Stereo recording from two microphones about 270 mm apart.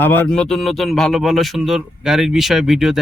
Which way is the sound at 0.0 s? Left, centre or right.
Centre.